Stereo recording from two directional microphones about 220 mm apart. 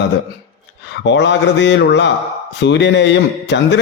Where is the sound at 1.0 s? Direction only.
55° left (ahead or behind).